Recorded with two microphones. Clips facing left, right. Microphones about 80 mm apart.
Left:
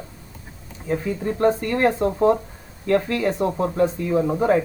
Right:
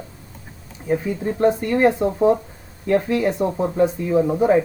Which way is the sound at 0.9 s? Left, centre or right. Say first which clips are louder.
Right 2 dB; centre.